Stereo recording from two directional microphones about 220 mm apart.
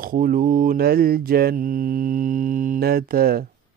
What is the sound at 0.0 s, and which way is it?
Mantra, 40° right (ahead or behind).